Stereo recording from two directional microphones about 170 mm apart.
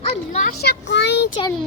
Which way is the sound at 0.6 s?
80° left.